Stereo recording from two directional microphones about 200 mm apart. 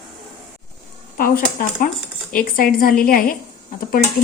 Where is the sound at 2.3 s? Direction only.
45° left (ahead or behind).